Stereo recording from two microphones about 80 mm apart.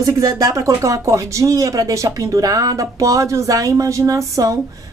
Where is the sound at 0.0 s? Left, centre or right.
Right.